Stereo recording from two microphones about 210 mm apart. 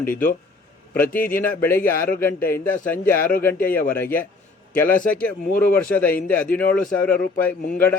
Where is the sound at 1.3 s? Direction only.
10° left (ahead or behind).